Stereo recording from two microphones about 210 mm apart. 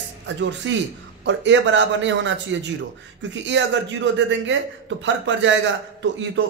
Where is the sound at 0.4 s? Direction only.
60° right (ahead or behind).